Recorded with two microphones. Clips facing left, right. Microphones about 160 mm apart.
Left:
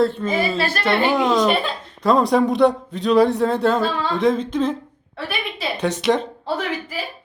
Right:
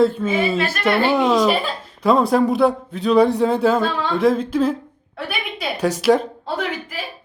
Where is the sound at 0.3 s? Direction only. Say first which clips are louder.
Right 1 dB; 35° left (ahead or behind).